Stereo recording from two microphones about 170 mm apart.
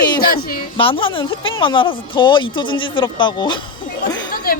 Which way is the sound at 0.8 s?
30° left (ahead or behind).